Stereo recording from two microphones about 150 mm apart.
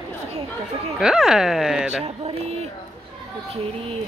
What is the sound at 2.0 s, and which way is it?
Speech, 40° right (ahead or behind).